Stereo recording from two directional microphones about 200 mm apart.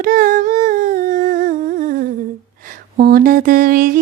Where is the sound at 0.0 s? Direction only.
45° right (ahead or behind).